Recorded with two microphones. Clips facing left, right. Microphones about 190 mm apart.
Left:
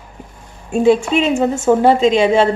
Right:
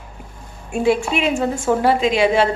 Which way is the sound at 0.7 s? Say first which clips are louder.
Left 5 dB; 20° left (ahead or behind).